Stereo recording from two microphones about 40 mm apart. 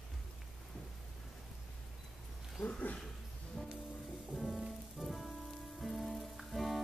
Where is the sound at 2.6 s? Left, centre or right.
Left.